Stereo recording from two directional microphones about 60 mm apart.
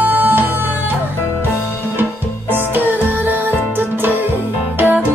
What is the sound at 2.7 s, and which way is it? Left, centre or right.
Music, right.